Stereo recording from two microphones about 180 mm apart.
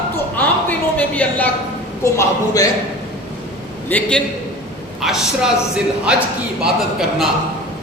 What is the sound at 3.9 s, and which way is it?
Speech, 10° left (ahead or behind).